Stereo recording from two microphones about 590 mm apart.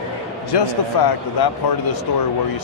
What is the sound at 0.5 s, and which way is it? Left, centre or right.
Speech, left.